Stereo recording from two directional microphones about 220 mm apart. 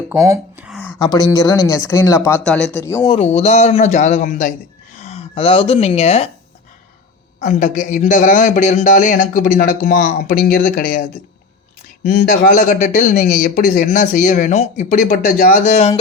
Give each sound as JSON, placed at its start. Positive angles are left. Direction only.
{"t": 0.1, "sound": "a sound", "side_deg": -10}
{"t": 1.1, "sound": "speech", "side_deg": 15}
{"t": 3.0, "sound": "a man's voice", "side_deg": 25}
{"t": 7.4, "sound": "speech", "side_deg": 35}